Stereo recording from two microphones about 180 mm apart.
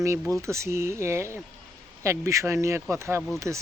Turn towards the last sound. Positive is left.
turn(degrees=-15)  # may be behind; listen again after turning